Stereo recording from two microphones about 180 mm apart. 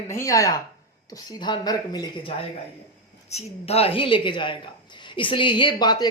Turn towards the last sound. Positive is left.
turn(degrees=25)  # may be behind; listen again after turning